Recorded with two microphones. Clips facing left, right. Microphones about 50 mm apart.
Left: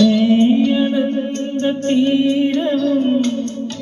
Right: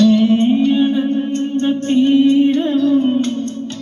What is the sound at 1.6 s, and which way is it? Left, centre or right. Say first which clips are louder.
Music: right 1 dB; centre.